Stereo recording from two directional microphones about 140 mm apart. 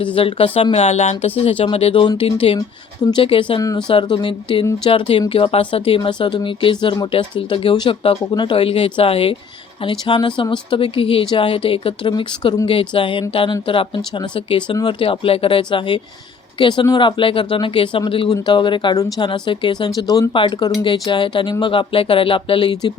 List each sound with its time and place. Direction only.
0.0 s speech: 40° left (ahead or behind)